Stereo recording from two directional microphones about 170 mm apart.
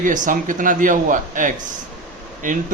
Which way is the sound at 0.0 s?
50° right (ahead or behind).